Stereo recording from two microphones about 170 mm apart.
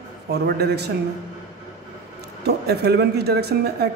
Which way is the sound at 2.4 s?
70° right (ahead or behind).